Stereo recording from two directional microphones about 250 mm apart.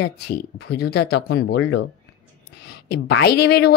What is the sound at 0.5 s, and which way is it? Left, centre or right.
Speech, left.